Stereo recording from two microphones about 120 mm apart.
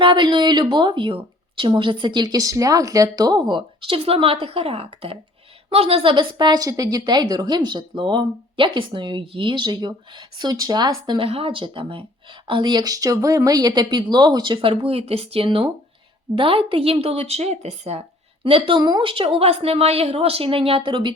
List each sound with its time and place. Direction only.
0.0 s a woman's voice: 45° right (ahead or behind)
6.3 s speech: 35° right (ahead or behind)
11.3 s a woman's voice: 50° right (ahead or behind)
18.4 s a woman's voice: 50° right (ahead or behind)